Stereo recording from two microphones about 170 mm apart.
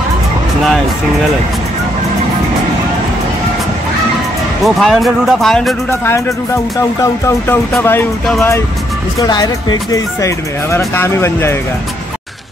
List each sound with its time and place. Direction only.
4.6 s speech: centre (ahead or behind)
5.9 s speech: 15° left (ahead or behind)
9.2 s speech: 25° left (ahead or behind)